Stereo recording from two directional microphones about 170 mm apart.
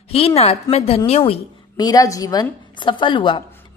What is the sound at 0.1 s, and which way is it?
A woman's voice, 35° left (ahead or behind).